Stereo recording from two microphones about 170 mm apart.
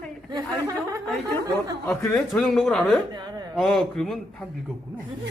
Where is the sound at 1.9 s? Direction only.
10° left (ahead or behind).